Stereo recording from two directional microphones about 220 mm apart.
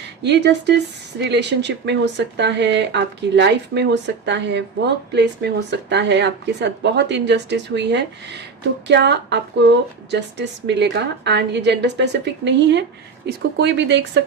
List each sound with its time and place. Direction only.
0.2 s speech: 50° right (ahead or behind)